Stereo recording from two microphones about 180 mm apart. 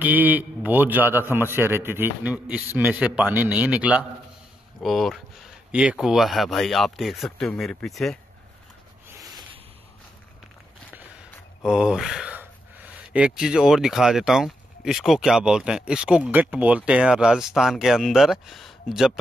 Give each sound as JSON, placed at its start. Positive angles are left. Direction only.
{"t": 0.0, "sound": "a man's voice", "side_deg": -10}
{"t": 9.2, "sound": "rub", "side_deg": -20}
{"t": 11.6, "sound": "speech", "side_deg": -5}